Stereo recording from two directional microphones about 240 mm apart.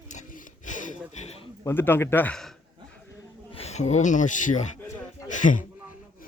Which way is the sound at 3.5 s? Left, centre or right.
Left.